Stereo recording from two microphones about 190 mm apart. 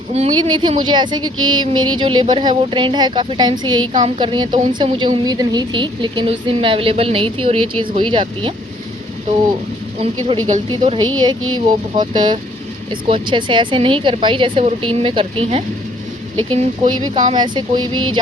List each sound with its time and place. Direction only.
0.1 s a woman's voice: 30° right (ahead or behind)
1.4 s a sound: 90° right
2.0 s a woman's voice: 25° right (ahead or behind)
10.0 s a woman's voice: 30° right (ahead or behind)